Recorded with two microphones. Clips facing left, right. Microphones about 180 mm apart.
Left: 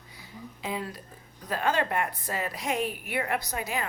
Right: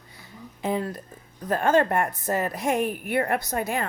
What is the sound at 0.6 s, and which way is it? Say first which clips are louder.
A woman's voice: right 7 dB; 55° right (ahead or behind).